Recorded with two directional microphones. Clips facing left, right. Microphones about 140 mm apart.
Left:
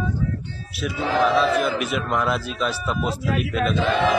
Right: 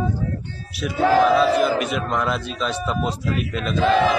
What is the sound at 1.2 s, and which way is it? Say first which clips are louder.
Speech: right 3 dB; centre (ahead or behind).